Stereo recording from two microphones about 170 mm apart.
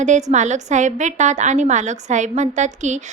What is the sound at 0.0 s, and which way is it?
A woman's voice, 45° right (ahead or behind).